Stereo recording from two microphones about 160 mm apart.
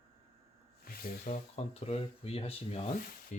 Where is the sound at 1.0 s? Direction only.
55° left (ahead or behind).